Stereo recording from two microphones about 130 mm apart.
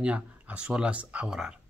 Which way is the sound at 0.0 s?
10° right (ahead or behind).